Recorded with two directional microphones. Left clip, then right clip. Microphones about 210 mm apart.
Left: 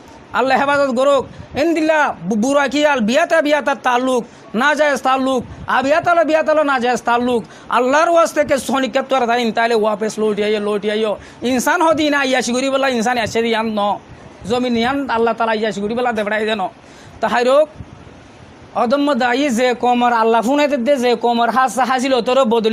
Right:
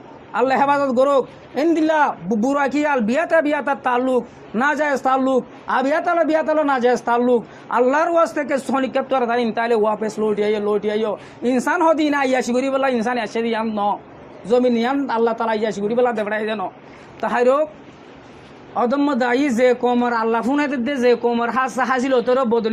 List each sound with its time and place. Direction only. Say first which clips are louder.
0.3 s a man's voice: left 2 dB; 40° left (ahead or behind)
18.7 s a man's voice: left 3 dB; 40° left (ahead or behind)